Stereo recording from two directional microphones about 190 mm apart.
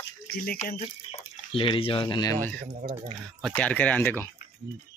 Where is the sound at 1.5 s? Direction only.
30° left (ahead or behind).